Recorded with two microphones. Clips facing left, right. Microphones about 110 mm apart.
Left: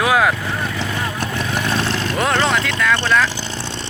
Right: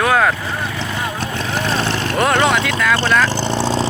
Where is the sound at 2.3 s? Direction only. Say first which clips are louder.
Right 2 dB; 5° right (ahead or behind).